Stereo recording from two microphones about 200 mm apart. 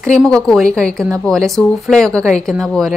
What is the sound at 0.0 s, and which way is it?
A woman's voice, 5° left (ahead or behind).